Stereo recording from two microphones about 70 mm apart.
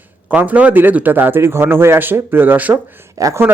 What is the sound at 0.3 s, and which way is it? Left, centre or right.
Speech, right.